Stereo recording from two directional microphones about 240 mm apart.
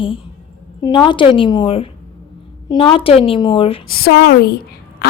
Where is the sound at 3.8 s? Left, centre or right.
Left.